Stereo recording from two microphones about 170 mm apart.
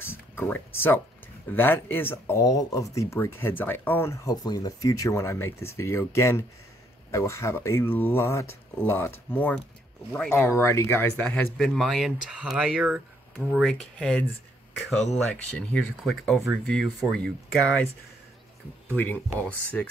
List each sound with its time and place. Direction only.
0.0 s speech: 15° left (ahead or behind)
18.9 s speech: 10° left (ahead or behind)